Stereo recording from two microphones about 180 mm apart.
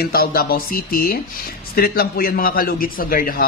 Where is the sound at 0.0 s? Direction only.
55° left (ahead or behind).